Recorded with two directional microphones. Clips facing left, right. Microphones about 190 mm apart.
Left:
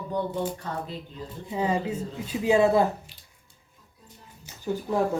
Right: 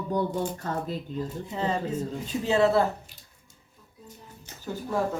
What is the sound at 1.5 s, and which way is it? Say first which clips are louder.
Speech: left 3 dB; 10° left (ahead or behind).